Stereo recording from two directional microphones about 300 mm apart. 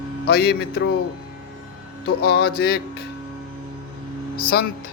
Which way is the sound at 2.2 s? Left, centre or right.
Left.